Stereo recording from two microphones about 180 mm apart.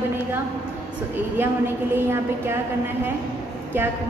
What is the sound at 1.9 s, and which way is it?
Speech, 15° right (ahead or behind).